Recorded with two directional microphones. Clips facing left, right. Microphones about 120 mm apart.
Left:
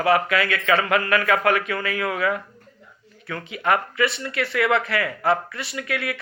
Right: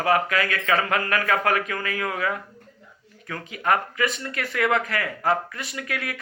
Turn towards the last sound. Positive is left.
turn(degrees=-40)  # may be behind; listen again after turning